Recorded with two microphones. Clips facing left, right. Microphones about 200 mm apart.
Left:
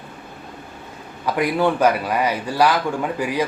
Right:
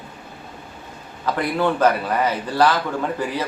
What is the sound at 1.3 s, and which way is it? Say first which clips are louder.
A man's voice: left 2 dB; 10° left (ahead or behind).